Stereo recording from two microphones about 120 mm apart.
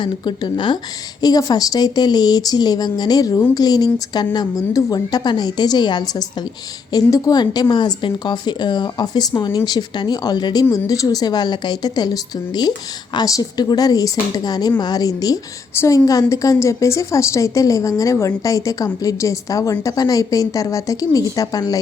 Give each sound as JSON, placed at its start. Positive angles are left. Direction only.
{"t": 0.0, "sound": "speech", "side_deg": 40}
{"t": 15.7, "sound": "a woman's voice", "side_deg": 20}